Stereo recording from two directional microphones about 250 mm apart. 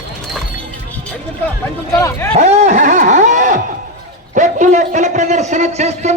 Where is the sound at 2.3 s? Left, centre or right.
Right.